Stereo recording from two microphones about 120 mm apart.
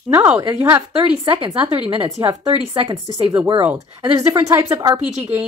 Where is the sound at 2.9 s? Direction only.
35° right (ahead or behind).